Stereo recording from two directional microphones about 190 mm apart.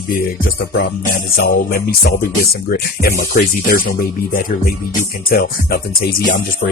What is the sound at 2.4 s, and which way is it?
Speech, 55° left (ahead or behind).